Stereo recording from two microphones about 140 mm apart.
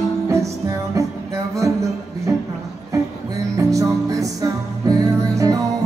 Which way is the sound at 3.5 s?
25° right (ahead or behind).